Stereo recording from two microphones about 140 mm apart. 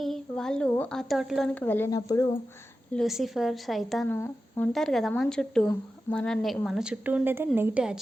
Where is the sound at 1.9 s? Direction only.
25° left (ahead or behind).